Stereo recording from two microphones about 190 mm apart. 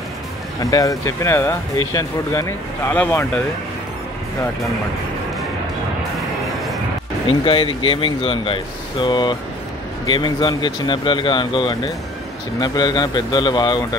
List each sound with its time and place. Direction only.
0.6 s speech: 20° left (ahead or behind)
7.4 s speech: 30° left (ahead or behind)